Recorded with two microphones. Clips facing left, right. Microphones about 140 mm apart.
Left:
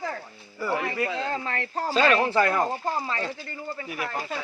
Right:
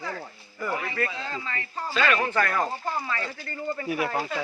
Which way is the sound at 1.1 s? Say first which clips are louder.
Left 5 dB; 55° left (ahead or behind).